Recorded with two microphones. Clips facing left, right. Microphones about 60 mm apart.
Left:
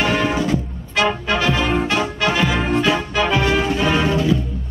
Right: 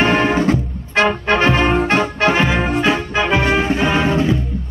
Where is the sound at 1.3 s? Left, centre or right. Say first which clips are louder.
Right 7 dB; right.